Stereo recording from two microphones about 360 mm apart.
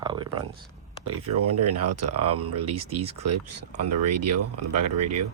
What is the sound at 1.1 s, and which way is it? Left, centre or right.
Speech, right.